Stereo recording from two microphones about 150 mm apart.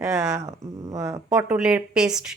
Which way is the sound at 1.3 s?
5° right (ahead or behind).